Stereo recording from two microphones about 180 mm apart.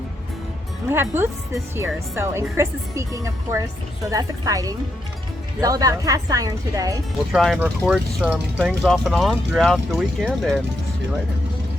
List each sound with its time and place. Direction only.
0.9 s speech: 15° right (ahead or behind)
7.3 s speech: centre (ahead or behind)